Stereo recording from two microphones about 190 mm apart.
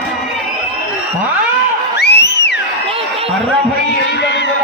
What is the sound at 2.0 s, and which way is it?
Music, 60° left (ahead or behind).